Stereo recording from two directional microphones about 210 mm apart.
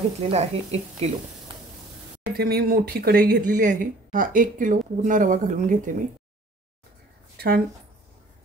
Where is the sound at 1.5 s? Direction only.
25° right (ahead or behind).